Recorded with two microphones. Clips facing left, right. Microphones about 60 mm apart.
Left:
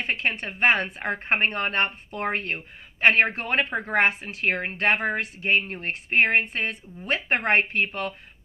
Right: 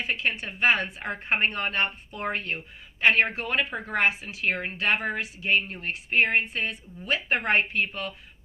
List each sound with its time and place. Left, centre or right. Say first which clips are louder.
0.0 s a woman's voice: left 2 dB; left